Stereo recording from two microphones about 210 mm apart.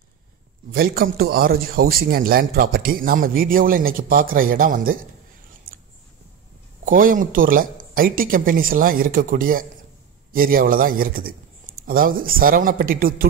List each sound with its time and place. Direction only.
0.7 s a man's voice: 45° right (ahead or behind)
6.9 s a man's voice: 40° right (ahead or behind)